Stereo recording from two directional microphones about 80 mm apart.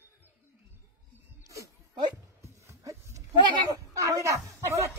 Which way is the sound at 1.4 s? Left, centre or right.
Right.